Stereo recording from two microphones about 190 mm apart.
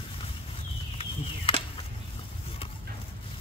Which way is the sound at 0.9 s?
30° left (ahead or behind).